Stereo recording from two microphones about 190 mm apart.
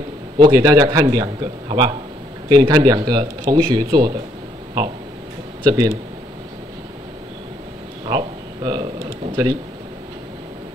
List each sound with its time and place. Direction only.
0.4 s speech: 20° right (ahead or behind)
5.7 s speech: 20° right (ahead or behind)
8.1 s a sound: 25° right (ahead or behind)